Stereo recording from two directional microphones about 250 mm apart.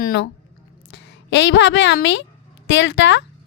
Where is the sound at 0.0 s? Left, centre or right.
Left.